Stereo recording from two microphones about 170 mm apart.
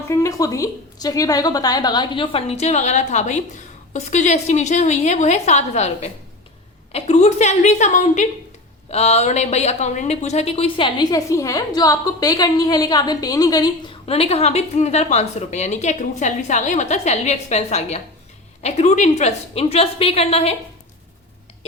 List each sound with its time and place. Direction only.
0.1 s a woman's voice: 20° left (ahead or behind)
14.1 s a woman's voice: 35° left (ahead or behind)